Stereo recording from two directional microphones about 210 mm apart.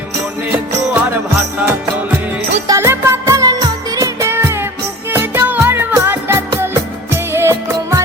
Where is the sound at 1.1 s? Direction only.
10° right (ahead or behind).